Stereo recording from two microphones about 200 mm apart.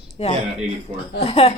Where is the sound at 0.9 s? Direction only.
30° right (ahead or behind).